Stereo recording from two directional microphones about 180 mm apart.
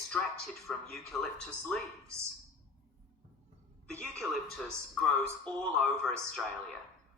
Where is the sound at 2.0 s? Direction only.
15° right (ahead or behind).